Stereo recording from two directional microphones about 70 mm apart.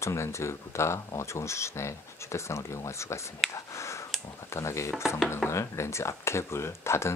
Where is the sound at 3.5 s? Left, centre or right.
Left.